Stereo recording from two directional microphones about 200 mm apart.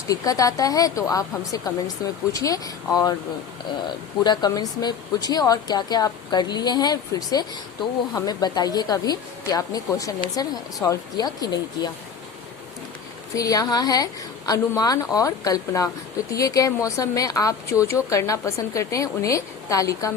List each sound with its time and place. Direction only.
0.1 s speech: 15° left (ahead or behind)
4.2 s speech: 20° left (ahead or behind)
13.3 s speech: 15° left (ahead or behind)